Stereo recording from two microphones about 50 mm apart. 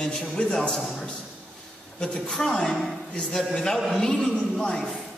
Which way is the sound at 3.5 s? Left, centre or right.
Centre.